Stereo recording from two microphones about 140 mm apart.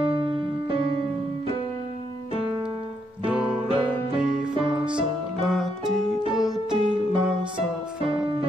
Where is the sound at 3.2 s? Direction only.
5° right (ahead or behind).